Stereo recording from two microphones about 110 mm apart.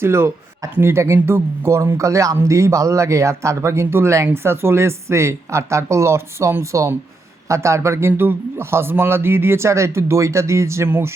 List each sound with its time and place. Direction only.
0.0 s speech: 20° right (ahead or behind)